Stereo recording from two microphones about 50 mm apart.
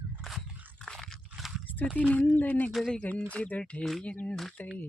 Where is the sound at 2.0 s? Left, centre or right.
Left.